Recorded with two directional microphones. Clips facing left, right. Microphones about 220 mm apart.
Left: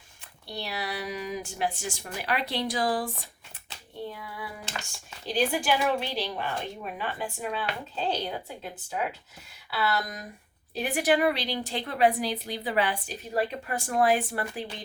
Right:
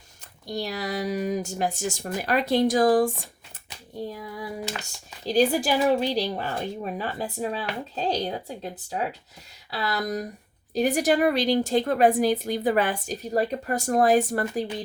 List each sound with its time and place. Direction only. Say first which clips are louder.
0.4 s a woman's voice: right 5 dB; 45° right (ahead or behind)
5.2 s a woman's voice: right 6 dB; 40° right (ahead or behind)